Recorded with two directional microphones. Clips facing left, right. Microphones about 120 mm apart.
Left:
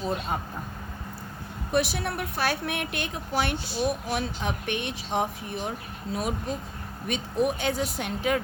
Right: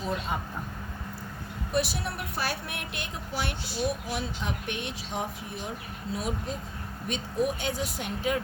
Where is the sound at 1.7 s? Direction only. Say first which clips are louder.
Left 3 dB; 60° left (ahead or behind).